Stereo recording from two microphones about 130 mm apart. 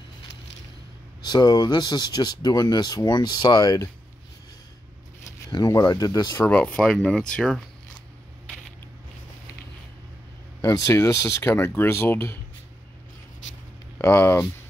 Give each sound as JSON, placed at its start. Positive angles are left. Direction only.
{"t": 1.2, "sound": "speech", "side_deg": 30}
{"t": 5.5, "sound": "speech", "side_deg": 30}
{"t": 6.4, "sound": "speech", "side_deg": 10}
{"t": 10.7, "sound": "speech", "side_deg": 20}
{"t": 13.9, "sound": "speech", "side_deg": 20}